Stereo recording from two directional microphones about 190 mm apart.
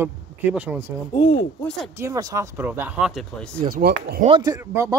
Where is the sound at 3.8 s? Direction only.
55° right (ahead or behind).